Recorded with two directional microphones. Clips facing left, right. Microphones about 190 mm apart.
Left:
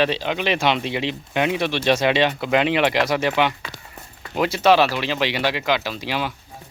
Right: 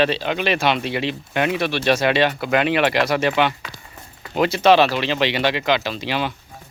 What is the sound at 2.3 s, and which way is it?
Speech, 10° right (ahead or behind).